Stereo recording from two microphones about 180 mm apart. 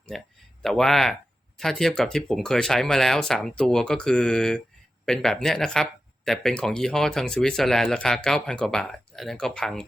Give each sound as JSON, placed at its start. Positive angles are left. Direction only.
{"t": 0.1, "sound": "speech", "side_deg": 0}